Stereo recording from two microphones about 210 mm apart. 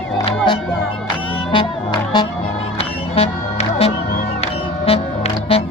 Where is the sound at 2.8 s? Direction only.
30° left (ahead or behind).